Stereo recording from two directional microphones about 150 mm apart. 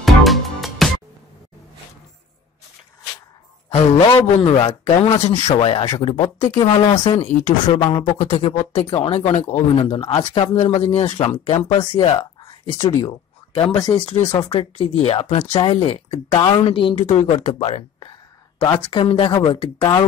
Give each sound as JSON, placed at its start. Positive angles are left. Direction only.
{"t": 0.0, "sound": "music", "side_deg": 0}
{"t": 3.7, "sound": "speech", "side_deg": 40}
{"t": 7.6, "sound": "speech", "side_deg": 30}
{"t": 8.0, "sound": "speech", "side_deg": 50}
{"t": 8.8, "sound": "speech", "side_deg": 35}
{"t": 12.7, "sound": "speech", "side_deg": 20}
{"t": 14.2, "sound": "speech", "side_deg": 50}
{"t": 17.0, "sound": "speech", "side_deg": 50}